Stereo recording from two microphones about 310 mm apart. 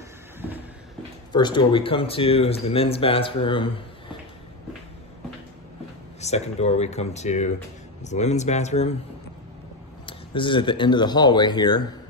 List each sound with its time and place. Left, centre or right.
1.3 s speech: centre
6.2 s speech: left
10.0 s speech: centre